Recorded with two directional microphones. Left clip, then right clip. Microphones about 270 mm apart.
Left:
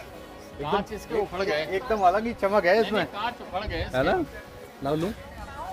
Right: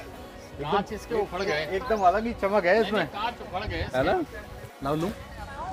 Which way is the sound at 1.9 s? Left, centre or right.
Centre.